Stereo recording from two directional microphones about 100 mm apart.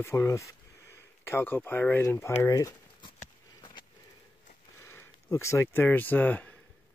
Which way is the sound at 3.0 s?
55° left (ahead or behind).